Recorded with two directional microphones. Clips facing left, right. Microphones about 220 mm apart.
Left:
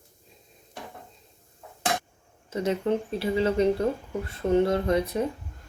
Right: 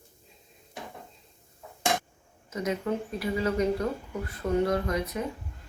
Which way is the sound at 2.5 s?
30° left (ahead or behind).